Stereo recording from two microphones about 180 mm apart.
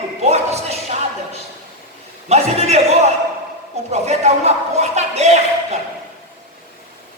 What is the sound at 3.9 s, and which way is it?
A man's voice, 35° right (ahead or behind).